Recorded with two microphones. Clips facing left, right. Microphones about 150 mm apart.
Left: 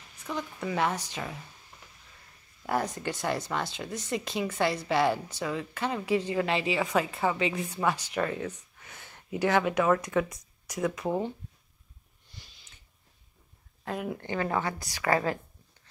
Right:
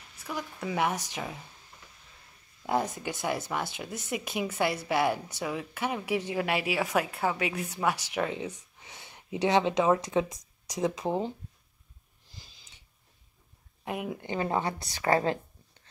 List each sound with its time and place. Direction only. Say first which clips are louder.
0.2 s a woman's voice: left 2 dB; 5° right (ahead or behind)
2.6 s a woman's voice: right 1 dB; 10° right (ahead or behind)
13.8 s a woman's voice: even; 15° right (ahead or behind)